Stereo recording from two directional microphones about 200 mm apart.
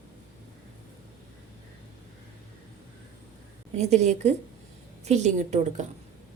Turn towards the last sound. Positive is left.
turn(degrees=-35)  # may be behind; listen again after turning